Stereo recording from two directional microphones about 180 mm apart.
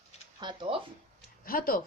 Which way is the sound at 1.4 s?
55° left (ahead or behind).